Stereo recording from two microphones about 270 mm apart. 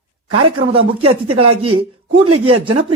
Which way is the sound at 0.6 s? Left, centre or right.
Right.